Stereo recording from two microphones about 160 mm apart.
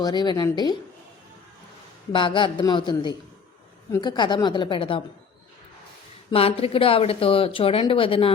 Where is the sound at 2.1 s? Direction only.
30° left (ahead or behind).